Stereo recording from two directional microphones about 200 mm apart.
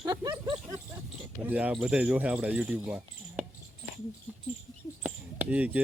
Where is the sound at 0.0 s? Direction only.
20° right (ahead or behind).